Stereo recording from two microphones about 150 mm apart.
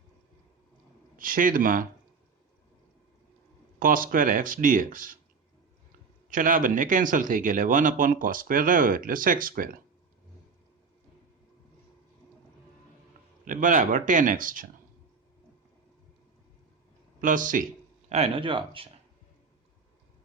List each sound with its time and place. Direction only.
1.1 s speech: 65° right (ahead or behind)
3.8 s speech: 70° right (ahead or behind)
6.3 s speech: 65° right (ahead or behind)
13.4 s speech: 60° right (ahead or behind)
17.2 s speech: 60° right (ahead or behind)
18.1 s speech: 40° right (ahead or behind)